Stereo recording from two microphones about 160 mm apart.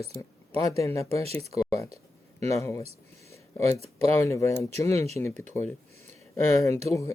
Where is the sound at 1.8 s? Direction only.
40° right (ahead or behind).